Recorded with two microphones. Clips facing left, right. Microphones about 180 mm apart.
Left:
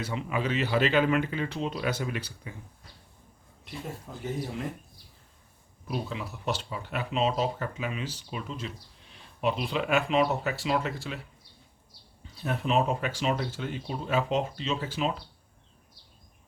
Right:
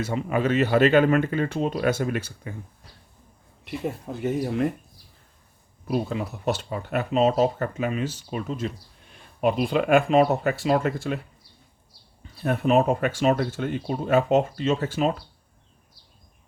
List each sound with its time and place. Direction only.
0.0 s speech: 45° right (ahead or behind)
3.6 s speech: 65° right (ahead or behind)
5.9 s speech: 45° right (ahead or behind)
12.4 s speech: 50° right (ahead or behind)